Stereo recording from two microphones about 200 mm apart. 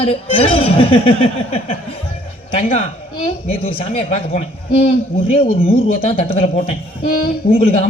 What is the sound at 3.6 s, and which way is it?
A man's voice, 30° left (ahead or behind).